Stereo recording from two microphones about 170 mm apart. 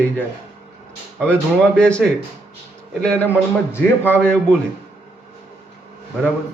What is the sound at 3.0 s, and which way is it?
A man's voice, 10° left (ahead or behind).